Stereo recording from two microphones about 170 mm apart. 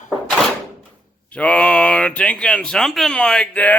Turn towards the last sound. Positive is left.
turn(degrees=10)  # may be behind; listen again after turning